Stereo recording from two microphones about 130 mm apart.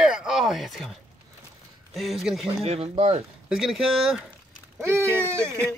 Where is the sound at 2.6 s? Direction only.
50° right (ahead or behind).